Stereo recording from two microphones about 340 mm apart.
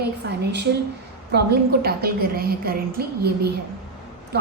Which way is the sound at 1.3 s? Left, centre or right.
Right.